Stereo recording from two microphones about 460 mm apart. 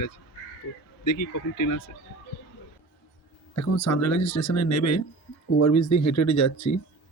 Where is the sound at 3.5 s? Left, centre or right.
Left.